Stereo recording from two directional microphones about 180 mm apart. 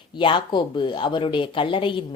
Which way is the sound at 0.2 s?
25° left (ahead or behind).